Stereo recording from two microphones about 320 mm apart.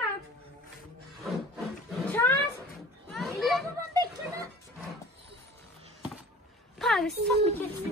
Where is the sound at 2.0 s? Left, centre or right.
Centre.